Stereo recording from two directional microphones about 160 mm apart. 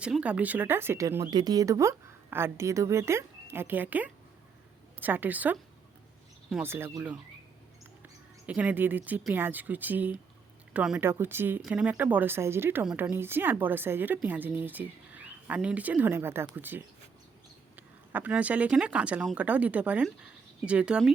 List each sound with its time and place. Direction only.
0.0 s speech: 5° right (ahead or behind)
6.6 s speech: 15° right (ahead or behind)
8.4 s speech: 10° right (ahead or behind)
12.8 s a woman's voice: 5° right (ahead or behind)
13.1 s speech: 15° right (ahead or behind)